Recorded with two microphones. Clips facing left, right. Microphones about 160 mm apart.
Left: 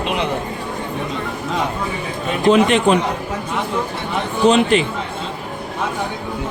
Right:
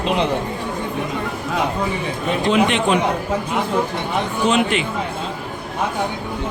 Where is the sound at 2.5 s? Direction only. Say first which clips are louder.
Left 5 dB; 40° left (ahead or behind).